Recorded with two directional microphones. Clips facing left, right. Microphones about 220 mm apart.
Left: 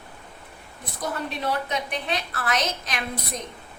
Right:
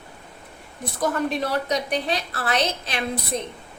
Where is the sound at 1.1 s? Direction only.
40° right (ahead or behind).